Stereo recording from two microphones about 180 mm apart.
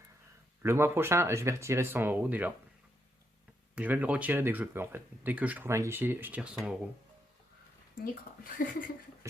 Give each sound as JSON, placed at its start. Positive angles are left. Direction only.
{"t": 0.6, "sound": "speech", "side_deg": -15}
{"t": 3.8, "sound": "speech", "side_deg": -10}
{"t": 7.9, "sound": "speech", "side_deg": 50}